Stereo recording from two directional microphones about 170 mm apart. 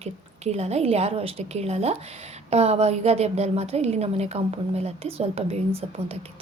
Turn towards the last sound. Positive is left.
turn(degrees=-35)  # may be behind; listen again after turning